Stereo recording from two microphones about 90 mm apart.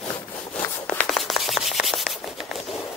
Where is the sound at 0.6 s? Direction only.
30° left (ahead or behind).